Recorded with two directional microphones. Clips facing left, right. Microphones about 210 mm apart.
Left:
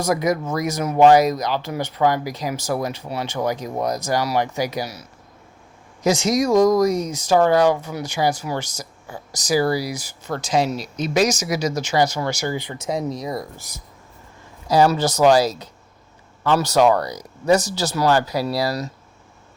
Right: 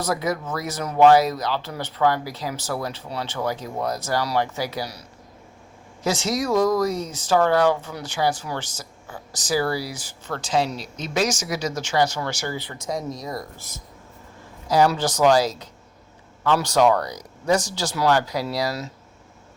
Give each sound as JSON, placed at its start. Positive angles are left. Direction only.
{"t": 0.0, "sound": "speech", "side_deg": 15}
{"t": 14.7, "sound": "speech", "side_deg": 10}